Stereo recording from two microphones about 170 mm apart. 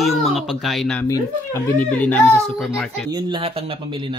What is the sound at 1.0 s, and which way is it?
Speech, 15° left (ahead or behind).